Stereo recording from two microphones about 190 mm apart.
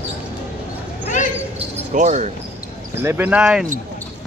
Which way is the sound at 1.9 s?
40° right (ahead or behind).